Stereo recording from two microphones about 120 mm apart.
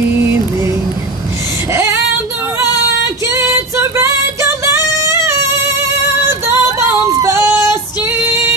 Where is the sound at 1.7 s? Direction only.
20° right (ahead or behind).